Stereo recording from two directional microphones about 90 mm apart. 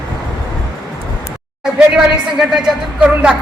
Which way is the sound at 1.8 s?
5° right (ahead or behind).